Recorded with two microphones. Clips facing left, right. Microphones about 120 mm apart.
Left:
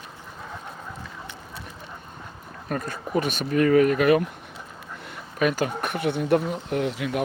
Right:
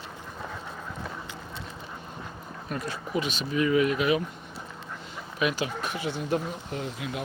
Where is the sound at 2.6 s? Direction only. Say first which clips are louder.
Left 4 dB; 50° left (ahead or behind).